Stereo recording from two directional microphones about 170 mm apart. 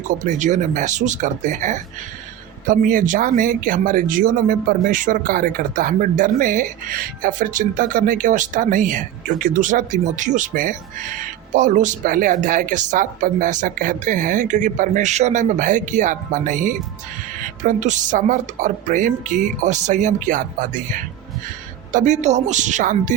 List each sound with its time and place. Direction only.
0.1 s speech: 45° right (ahead or behind)